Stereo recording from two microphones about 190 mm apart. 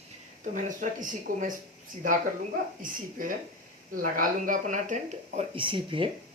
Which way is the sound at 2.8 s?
45° right (ahead or behind).